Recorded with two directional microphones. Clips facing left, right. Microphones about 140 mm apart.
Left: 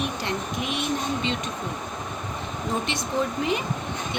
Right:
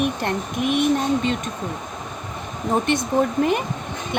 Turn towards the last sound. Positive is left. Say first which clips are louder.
# right 6 dB
turn(degrees=-55)  # may be behind; listen again after turning